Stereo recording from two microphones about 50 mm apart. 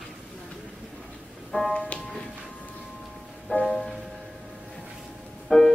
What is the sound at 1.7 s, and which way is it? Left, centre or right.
Music, left.